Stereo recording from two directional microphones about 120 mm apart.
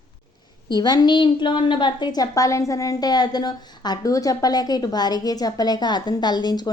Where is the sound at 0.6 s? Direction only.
35° left (ahead or behind).